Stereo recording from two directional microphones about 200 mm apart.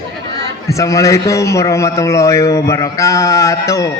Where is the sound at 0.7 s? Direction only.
15° left (ahead or behind).